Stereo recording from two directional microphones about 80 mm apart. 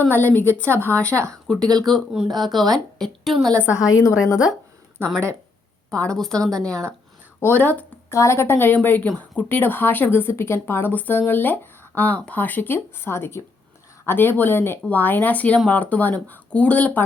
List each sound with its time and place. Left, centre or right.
0.0 s a woman's voice: left
1.3 s a woman's voice: centre
3.7 s a woman's voice: left
5.9 s a woman's voice: centre
7.3 s a woman's voice: left
8.1 s a woman's voice: left; by 17.0 s centre